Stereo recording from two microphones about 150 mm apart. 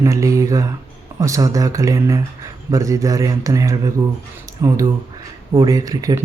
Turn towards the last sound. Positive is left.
turn(degrees=-25)  # may be behind; listen again after turning